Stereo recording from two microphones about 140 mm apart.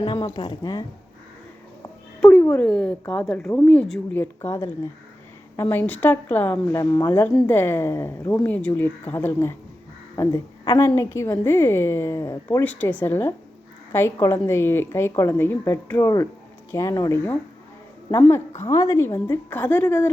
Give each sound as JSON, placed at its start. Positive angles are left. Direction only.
{"t": 0.0, "sound": "speech", "side_deg": 35}
{"t": 2.4, "sound": "a woman's voice", "side_deg": 10}
{"t": 4.1, "sound": "a woman's voice", "side_deg": 15}
{"t": 12.5, "sound": "a woman's voice", "side_deg": 10}